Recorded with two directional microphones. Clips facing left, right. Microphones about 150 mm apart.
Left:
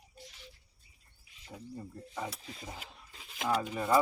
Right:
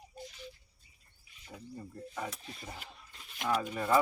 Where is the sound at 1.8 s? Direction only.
15° left (ahead or behind).